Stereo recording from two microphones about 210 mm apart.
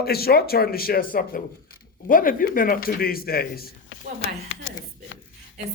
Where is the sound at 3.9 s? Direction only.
65° left (ahead or behind).